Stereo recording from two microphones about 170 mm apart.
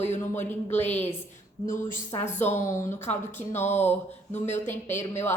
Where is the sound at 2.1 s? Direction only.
25° left (ahead or behind).